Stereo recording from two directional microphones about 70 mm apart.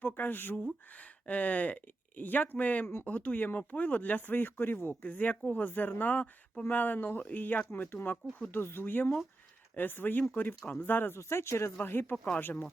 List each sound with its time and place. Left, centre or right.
0.0 s speech: left
11.2 s speech: left
12.1 s speech: centre
12.4 s speech: left